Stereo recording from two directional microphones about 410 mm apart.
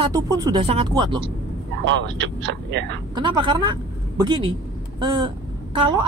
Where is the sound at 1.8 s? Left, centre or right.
Right.